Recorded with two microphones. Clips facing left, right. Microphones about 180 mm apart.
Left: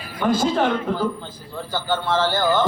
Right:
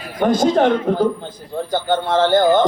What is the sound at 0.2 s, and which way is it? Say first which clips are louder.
A man's voice: right 5 dB; 50° right (ahead or behind).